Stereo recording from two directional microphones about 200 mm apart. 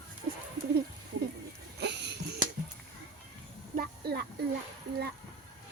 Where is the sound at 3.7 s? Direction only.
50° right (ahead or behind).